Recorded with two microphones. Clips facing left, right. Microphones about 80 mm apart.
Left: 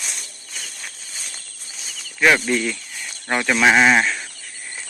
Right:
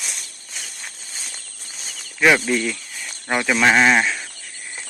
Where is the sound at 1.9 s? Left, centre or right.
Centre.